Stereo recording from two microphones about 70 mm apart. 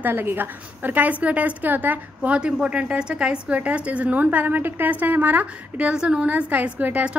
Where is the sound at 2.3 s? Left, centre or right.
Centre.